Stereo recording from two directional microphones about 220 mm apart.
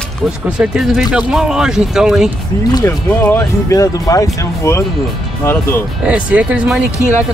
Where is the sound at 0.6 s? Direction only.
5° right (ahead or behind).